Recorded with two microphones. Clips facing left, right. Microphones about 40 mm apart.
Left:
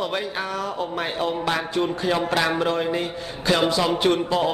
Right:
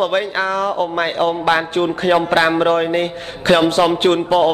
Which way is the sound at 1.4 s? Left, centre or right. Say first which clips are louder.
Right 7 dB; right.